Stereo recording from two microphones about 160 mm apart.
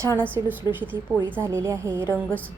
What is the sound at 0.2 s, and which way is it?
A woman's voice, 15° right (ahead or behind).